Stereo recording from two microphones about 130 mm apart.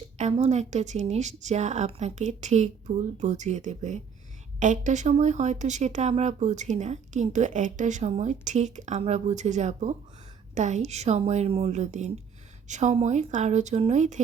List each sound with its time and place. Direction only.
0.2 s speech: 60° right (ahead or behind)
4.6 s speech: 75° right (ahead or behind)